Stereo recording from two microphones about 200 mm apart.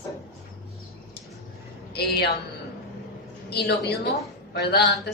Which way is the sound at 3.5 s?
55° left (ahead or behind).